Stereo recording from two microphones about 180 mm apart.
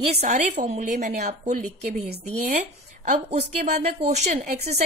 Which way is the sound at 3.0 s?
40° right (ahead or behind).